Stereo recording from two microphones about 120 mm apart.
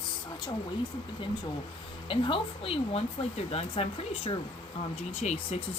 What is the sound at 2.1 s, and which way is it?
Speech, 45° left (ahead or behind).